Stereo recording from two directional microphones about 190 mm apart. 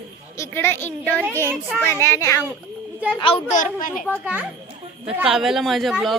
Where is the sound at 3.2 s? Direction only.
30° left (ahead or behind).